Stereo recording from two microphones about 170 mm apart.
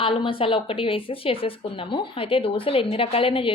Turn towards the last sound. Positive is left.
turn(degrees=30)  # may be behind; listen again after turning